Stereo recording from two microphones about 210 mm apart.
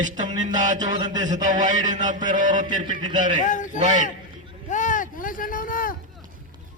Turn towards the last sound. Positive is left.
turn(degrees=40)  # may be behind; listen again after turning